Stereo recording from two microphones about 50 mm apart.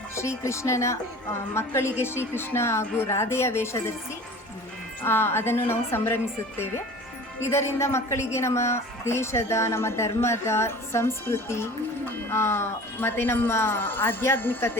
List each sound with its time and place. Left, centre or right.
0.2 s a woman's voice: left
5.0 s speech: left
7.4 s a woman's voice: left